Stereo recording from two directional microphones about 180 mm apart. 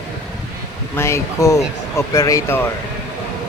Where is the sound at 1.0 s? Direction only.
15° left (ahead or behind).